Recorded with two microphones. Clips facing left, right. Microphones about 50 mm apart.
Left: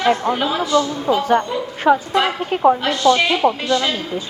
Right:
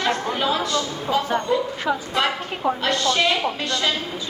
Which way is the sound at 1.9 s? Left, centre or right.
Left.